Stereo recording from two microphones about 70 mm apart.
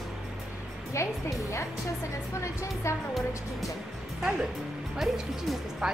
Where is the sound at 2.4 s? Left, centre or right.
Left.